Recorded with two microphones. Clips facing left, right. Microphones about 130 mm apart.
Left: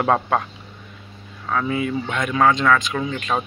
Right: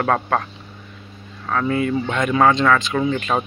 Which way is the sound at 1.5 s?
5° left (ahead or behind).